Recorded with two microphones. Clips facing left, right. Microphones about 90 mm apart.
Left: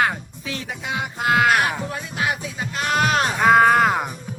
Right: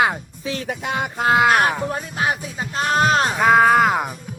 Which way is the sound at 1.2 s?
25° right (ahead or behind).